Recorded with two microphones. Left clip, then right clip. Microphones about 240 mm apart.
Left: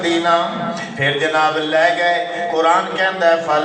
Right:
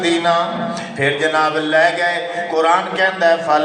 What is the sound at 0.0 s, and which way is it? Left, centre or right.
Mantra, right.